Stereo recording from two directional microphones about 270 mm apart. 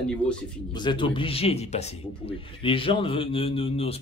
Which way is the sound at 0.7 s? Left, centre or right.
Centre.